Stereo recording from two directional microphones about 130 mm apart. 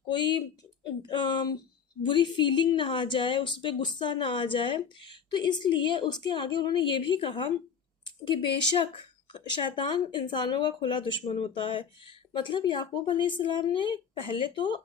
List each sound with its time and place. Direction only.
0.1 s speech: 35° left (ahead or behind)